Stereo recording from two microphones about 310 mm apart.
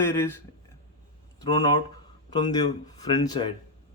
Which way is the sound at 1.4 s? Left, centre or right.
Centre.